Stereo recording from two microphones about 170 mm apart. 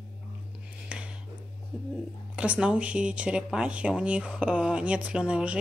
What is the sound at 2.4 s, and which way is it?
Speech, 5° right (ahead or behind).